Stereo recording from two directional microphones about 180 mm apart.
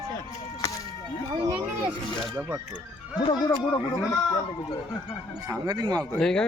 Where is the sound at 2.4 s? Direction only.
15° right (ahead or behind).